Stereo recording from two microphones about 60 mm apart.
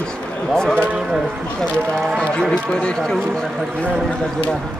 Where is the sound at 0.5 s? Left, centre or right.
Centre.